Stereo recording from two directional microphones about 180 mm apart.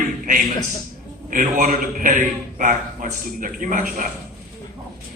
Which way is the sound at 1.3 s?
45° right (ahead or behind).